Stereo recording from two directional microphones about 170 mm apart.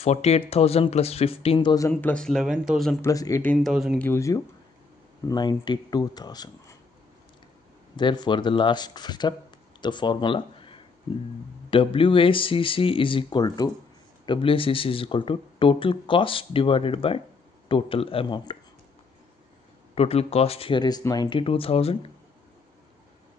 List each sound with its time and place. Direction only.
0.0 s speech: 40° left (ahead or behind)
1.9 s speech: 10° left (ahead or behind)
3.0 s speech: 20° left (ahead or behind)
3.6 s speech: centre (ahead or behind)
4.0 s speech: 15° left (ahead or behind)
7.9 s speech: 25° left (ahead or behind)
20.0 s speech: 35° left (ahead or behind)